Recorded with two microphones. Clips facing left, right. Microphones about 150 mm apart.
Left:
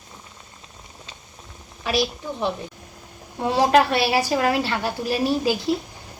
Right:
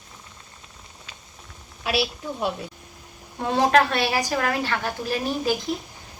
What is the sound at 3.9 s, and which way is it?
A woman's voice, 10° left (ahead or behind).